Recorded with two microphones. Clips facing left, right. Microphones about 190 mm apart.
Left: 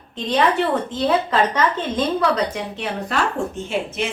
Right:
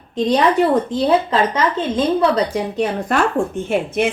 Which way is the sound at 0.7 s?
35° right (ahead or behind).